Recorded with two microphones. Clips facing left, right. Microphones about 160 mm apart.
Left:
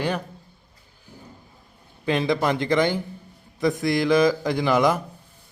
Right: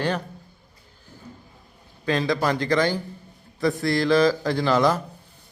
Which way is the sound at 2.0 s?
20° left (ahead or behind).